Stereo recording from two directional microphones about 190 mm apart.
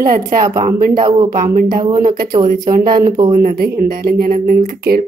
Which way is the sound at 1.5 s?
45° right (ahead or behind).